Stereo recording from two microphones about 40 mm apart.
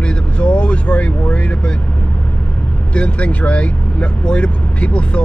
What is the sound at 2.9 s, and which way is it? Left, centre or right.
Speech, left.